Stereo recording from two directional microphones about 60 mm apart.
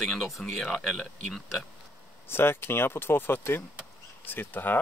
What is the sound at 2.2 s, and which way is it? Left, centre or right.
Speech, left.